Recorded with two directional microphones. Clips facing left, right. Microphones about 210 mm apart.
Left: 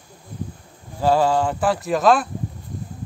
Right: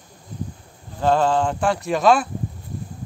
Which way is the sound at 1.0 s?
5° left (ahead or behind).